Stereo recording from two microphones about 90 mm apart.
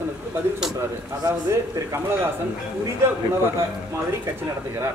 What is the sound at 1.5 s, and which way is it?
Speech, 30° right (ahead or behind).